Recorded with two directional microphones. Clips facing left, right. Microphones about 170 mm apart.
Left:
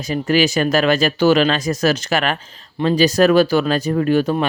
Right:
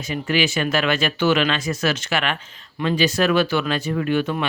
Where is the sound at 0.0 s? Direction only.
40° left (ahead or behind).